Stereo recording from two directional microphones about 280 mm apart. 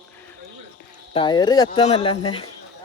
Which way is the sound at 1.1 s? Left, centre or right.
Centre.